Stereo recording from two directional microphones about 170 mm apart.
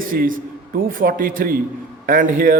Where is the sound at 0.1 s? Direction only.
55° right (ahead or behind).